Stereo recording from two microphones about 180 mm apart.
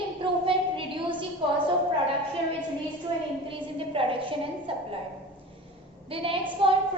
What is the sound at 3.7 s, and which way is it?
A woman's voice, 30° right (ahead or behind).